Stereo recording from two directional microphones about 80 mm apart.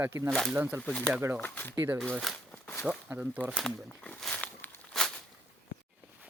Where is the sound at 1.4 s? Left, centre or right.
Left.